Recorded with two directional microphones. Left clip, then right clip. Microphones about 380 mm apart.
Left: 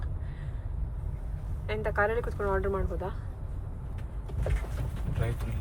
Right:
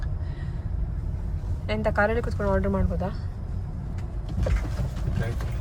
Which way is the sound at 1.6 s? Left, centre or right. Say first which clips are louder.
Right 5 dB; centre.